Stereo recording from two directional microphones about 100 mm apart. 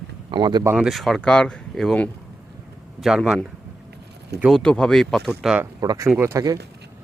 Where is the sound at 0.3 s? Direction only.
45° right (ahead or behind).